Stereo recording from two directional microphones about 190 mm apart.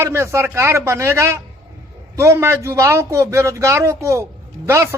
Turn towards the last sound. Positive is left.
turn(degrees=-15)  # may be behind; listen again after turning